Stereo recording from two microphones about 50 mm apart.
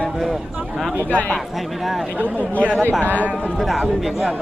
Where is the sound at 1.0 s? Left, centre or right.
Left.